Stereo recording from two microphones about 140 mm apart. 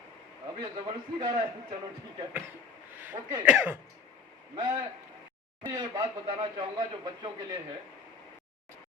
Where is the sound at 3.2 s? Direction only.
25° right (ahead or behind).